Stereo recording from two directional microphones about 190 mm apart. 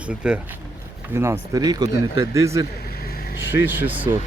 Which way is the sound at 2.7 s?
55° left (ahead or behind).